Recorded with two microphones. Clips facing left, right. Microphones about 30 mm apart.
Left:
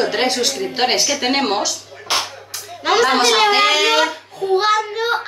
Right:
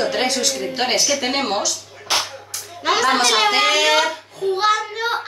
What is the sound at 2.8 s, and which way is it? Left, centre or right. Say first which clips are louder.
A child's voice: left 2 dB; centre.